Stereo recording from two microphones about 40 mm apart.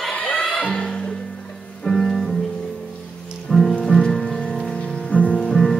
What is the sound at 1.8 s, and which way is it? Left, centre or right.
Music, centre.